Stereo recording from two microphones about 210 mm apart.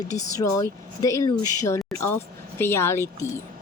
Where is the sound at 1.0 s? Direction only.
15° left (ahead or behind).